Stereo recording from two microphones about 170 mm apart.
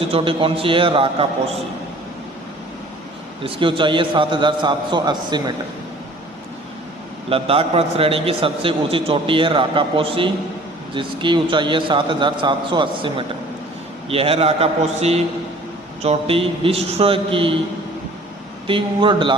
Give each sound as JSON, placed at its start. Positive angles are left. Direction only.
{"t": 0.1, "sound": "a man's voice", "side_deg": -35}
{"t": 3.4, "sound": "a man's voice", "side_deg": -30}
{"t": 7.3, "sound": "a man's voice", "side_deg": -35}
{"t": 18.7, "sound": "a man's voice", "side_deg": -30}